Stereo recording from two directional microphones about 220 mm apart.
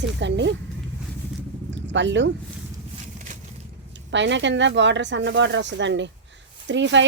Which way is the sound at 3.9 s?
55° right (ahead or behind).